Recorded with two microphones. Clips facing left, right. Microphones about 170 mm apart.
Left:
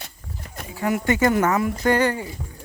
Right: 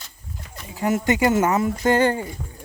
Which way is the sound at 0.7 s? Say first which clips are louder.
Right 1 dB; 20° right (ahead or behind).